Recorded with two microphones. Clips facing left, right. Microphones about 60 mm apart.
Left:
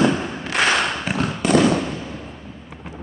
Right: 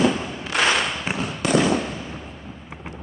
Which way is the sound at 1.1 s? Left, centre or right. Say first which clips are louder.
Left 4 dB; left.